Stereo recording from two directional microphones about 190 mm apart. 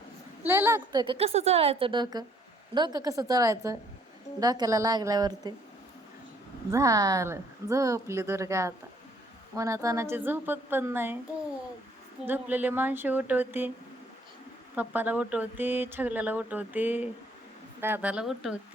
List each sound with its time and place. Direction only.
0.4 s speech: 10° right (ahead or behind)
0.8 s a woman's voice: 25° right (ahead or behind)
6.7 s speech: 15° right (ahead or behind)
12.2 s speech: 10° right (ahead or behind)
14.8 s speech: 10° right (ahead or behind)